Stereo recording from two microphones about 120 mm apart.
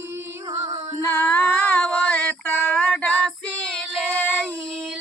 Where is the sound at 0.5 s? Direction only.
30° right (ahead or behind).